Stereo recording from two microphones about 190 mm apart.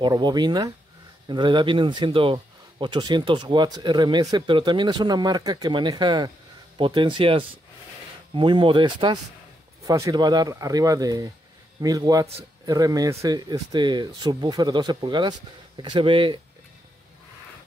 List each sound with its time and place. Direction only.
0.0 s speech: 20° right (ahead or behind)